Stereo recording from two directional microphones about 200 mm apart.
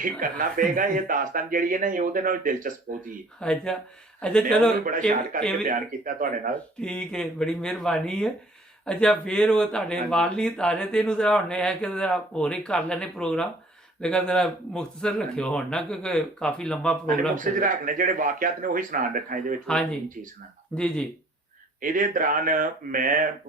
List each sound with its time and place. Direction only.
0.2 s speech: 40° right (ahead or behind)
3.4 s speech: 5° left (ahead or behind)
4.9 s speech: 40° right (ahead or behind)
6.8 s speech: 5° left (ahead or behind)
17.3 s speech: 40° right (ahead or behind)
19.6 s speech: 5° left (ahead or behind)
21.8 s speech: 45° right (ahead or behind)